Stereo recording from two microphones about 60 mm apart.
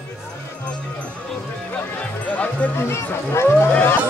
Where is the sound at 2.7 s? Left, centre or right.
Left.